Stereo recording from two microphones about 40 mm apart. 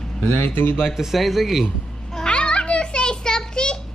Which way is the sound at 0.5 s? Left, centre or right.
Left.